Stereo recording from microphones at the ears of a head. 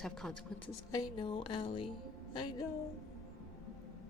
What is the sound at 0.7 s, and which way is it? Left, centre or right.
Speech, left.